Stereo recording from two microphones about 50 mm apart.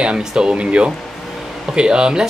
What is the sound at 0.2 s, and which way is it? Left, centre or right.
Speech, centre.